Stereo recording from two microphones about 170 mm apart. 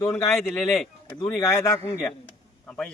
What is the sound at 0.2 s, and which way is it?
Speech, 15° left (ahead or behind).